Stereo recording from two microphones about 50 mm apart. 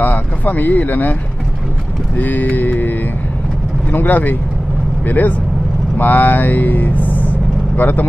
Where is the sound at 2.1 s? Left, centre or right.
Left.